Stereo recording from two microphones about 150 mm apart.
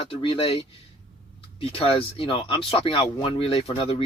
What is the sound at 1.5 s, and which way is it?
Speech, 40° left (ahead or behind).